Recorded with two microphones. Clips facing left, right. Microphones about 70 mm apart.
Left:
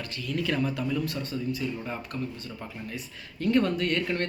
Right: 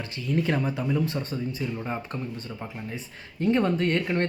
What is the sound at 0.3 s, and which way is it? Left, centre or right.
Speech, right.